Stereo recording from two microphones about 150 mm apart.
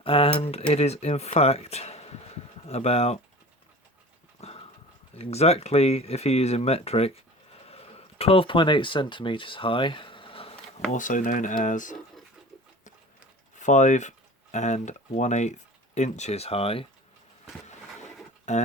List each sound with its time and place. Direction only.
0.0 s speech: 40° left (ahead or behind)
4.4 s clip-clop: 45° left (ahead or behind)
5.1 s speech: 45° left (ahead or behind)
10.9 s speech: 60° left (ahead or behind)
13.6 s speech: 55° left (ahead or behind)
18.5 s speech: 50° left (ahead or behind)